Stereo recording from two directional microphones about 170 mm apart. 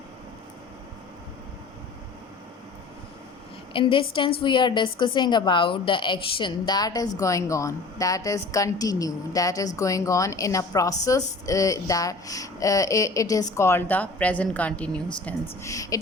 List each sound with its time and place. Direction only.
3.7 s a woman's voice: 30° left (ahead or behind); by 15.4 s 10° left (ahead or behind)
15.6 s a woman's voice: 20° left (ahead or behind)